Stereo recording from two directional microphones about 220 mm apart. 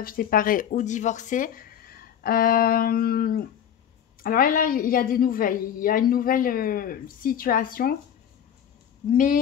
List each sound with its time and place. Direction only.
0.0 s a woman's voice: 40° left (ahead or behind)
9.0 s a woman's voice: 40° left (ahead or behind)